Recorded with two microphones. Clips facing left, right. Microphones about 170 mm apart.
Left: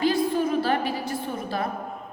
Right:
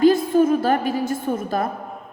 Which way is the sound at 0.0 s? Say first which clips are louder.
Right 7 dB; 45° right (ahead or behind).